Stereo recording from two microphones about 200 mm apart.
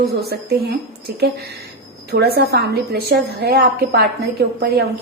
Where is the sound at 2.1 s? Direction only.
50° right (ahead or behind).